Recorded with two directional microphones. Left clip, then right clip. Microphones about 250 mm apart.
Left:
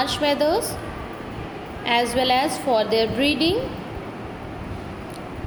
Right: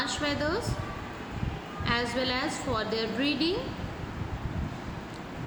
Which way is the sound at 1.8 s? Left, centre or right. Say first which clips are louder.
Left 9 dB; centre.